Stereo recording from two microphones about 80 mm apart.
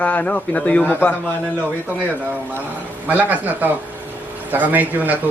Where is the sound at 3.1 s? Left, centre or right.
Centre.